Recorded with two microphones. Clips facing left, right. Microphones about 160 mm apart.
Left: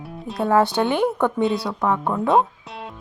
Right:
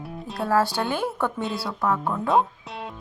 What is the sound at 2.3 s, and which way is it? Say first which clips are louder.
Music: left 3 dB; centre (ahead or behind).